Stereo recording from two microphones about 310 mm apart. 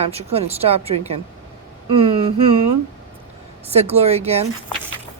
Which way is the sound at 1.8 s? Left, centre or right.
Centre.